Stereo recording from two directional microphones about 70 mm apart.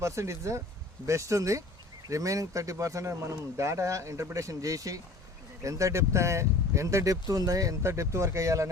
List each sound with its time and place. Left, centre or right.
0.0 s speech: right